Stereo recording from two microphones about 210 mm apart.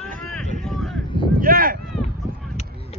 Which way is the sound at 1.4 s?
45° right (ahead or behind).